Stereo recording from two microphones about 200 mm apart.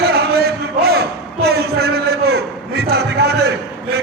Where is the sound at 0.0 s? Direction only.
50° right (ahead or behind).